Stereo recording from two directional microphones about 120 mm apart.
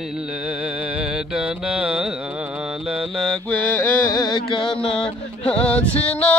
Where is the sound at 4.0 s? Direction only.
30° left (ahead or behind).